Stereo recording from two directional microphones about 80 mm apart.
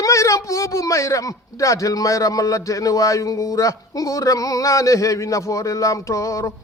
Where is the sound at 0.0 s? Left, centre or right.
Left.